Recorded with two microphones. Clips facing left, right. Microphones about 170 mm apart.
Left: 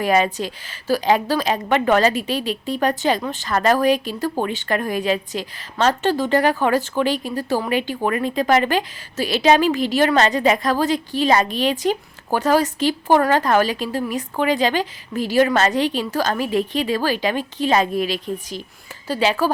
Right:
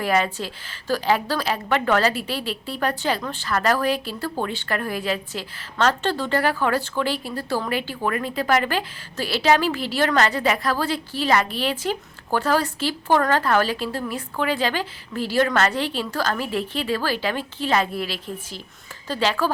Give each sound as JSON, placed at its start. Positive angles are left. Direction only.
{"t": 0.0, "sound": "a woman's voice", "side_deg": 20}